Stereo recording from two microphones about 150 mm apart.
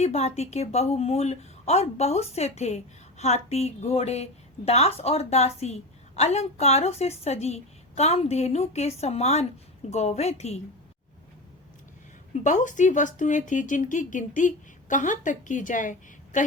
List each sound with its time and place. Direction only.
0.0 s a woman's voice: 45° left (ahead or behind)
12.3 s speech: 55° left (ahead or behind)